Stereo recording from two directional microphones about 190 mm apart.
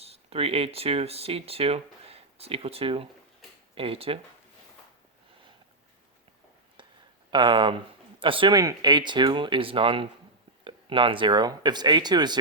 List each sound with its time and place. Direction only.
0.0 s speech: 30° right (ahead or behind)
6.8 s a sound: 25° right (ahead or behind)
7.3 s speech: 25° right (ahead or behind)